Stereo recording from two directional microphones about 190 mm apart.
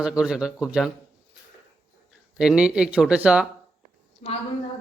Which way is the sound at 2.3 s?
5° right (ahead or behind).